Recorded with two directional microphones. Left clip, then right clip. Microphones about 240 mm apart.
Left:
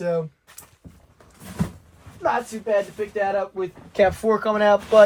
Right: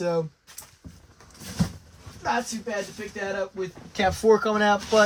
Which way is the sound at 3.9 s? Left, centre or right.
Centre.